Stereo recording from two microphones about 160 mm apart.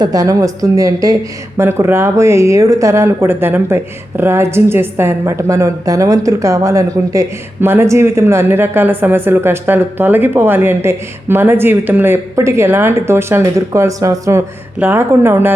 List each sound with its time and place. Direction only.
0.0 s a woman's voice: 20° right (ahead or behind)